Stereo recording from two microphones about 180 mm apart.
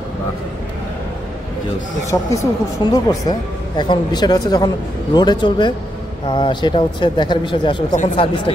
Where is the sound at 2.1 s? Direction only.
20° left (ahead or behind).